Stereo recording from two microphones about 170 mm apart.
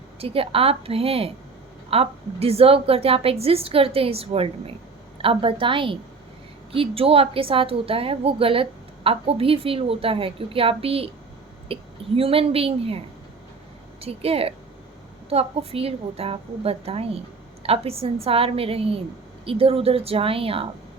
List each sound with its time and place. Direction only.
0.2 s a woman's voice: 35° right (ahead or behind)
14.0 s a woman's voice: 35° right (ahead or behind)